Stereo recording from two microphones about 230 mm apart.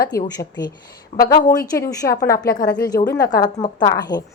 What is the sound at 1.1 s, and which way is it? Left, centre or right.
A woman's voice, left.